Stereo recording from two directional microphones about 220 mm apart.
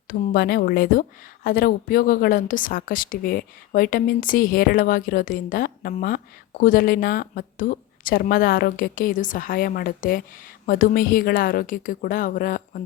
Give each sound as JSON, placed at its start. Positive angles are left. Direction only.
{"t": 0.1, "sound": "a woman's voice", "side_deg": 45}